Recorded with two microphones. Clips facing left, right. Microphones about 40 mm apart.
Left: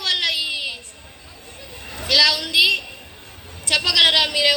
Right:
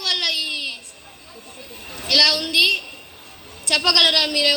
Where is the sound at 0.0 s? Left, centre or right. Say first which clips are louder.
Left 1 dB; left.